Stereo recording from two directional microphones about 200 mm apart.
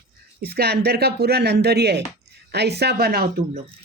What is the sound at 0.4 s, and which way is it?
Speech, 50° right (ahead or behind).